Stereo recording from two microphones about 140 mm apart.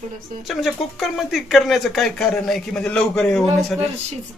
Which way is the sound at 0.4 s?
Centre (ahead or behind).